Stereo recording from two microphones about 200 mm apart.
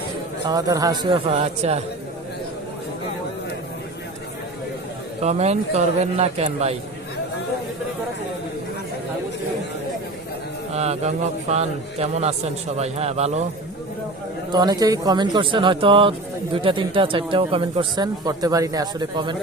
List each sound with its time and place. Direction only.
0.4 s speech: 20° right (ahead or behind)
1.4 s a man's voice: 30° right (ahead or behind)
5.2 s a man's voice: 35° right (ahead or behind)
10.8 s a man's voice: 35° right (ahead or behind)
14.5 s speech: 20° right (ahead or behind)